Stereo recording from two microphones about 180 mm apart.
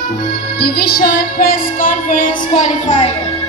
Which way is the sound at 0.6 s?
60° left (ahead or behind).